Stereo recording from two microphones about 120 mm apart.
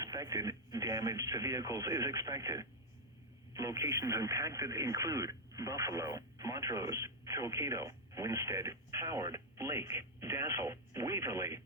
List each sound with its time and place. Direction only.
0.0 s speech: 30° right (ahead or behind)